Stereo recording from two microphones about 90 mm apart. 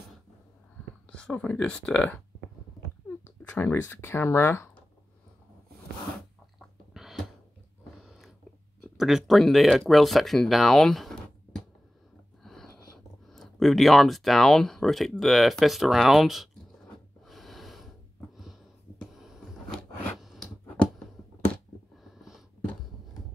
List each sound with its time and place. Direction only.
1.1 s speech: 10° left (ahead or behind)
3.5 s speech: 25° left (ahead or behind)
6.9 s a sound: 5° right (ahead or behind)
8.9 s speech: 5° right (ahead or behind)
12.4 s a sound: 5° left (ahead or behind)
13.3 s speech: centre (ahead or behind)
17.3 s snort: centre (ahead or behind)
19.1 s vehicle: centre (ahead or behind)
20.2 s a sound: centre (ahead or behind)